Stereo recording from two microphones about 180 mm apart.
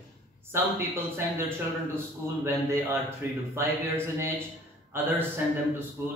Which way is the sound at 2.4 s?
15° right (ahead or behind).